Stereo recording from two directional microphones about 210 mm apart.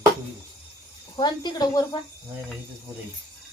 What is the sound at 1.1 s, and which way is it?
Speech, 20° left (ahead or behind).